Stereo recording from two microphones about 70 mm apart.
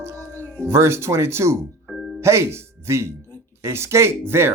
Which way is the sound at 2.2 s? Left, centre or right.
Right.